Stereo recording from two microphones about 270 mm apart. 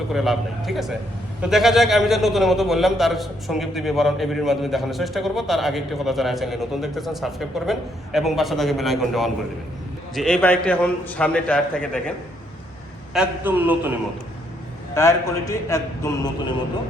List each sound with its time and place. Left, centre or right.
0.1 s a man's voice: centre
13.1 s a man's voice: centre
14.9 s a man's voice: centre